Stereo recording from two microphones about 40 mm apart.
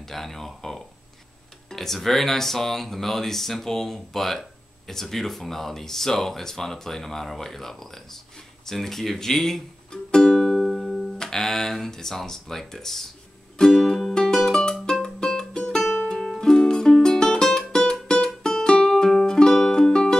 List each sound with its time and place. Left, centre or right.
0.0 s a sound: centre
1.7 s speech: centre
9.8 s music: centre
11.1 s speech: centre
13.6 s music: centre